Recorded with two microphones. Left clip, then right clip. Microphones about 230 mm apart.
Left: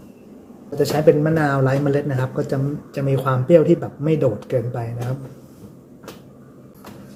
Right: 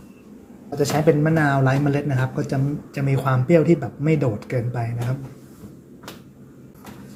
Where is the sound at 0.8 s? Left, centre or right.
Centre.